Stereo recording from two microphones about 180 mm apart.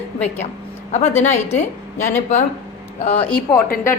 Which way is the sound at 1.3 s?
40° left (ahead or behind).